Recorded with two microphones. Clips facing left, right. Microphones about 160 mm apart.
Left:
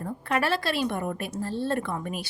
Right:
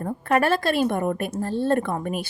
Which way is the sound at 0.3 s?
50° right (ahead or behind).